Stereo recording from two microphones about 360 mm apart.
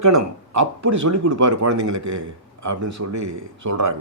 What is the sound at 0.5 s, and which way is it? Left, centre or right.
Speech, right.